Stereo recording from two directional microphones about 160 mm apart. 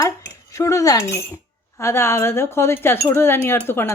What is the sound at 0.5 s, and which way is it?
Speech, 20° left (ahead or behind).